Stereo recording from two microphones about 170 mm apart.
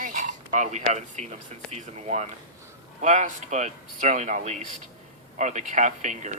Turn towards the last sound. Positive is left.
turn(degrees=-45)  # may be behind; listen again after turning